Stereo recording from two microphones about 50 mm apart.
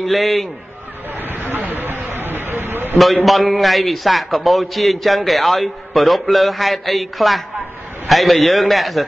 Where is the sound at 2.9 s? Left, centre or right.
Centre.